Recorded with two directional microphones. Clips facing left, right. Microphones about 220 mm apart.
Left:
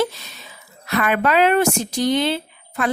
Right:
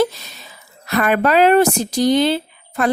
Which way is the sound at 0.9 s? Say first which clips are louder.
Right 3 dB; 40° right (ahead or behind).